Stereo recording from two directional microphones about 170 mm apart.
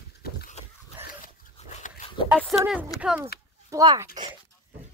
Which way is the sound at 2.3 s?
Centre (ahead or behind).